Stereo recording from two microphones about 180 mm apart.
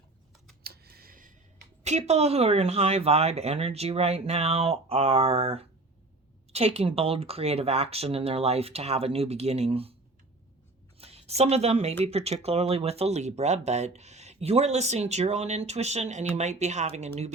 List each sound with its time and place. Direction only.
0.6 s a sound: 60° right (ahead or behind)
1.8 s speech: 40° right (ahead or behind)
11.0 s speech: 35° right (ahead or behind)